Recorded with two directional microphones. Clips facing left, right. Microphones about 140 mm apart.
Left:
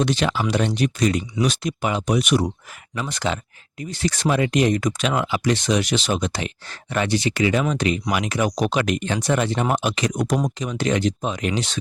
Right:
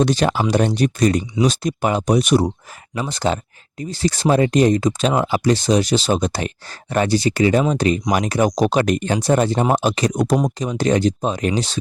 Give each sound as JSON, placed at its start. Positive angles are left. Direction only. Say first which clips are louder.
{"t": 0.0, "sound": "speech", "louder": "right 4 dB", "side_deg": -40}